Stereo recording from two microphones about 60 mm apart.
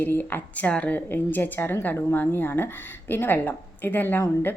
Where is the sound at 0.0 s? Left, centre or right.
Left.